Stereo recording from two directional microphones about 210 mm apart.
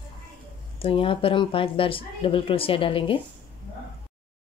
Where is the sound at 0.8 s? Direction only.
25° left (ahead or behind).